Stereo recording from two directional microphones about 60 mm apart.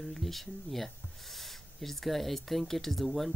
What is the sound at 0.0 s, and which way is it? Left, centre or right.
Speech, centre.